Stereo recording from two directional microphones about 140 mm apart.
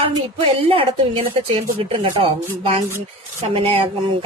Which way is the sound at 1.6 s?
40° right (ahead or behind).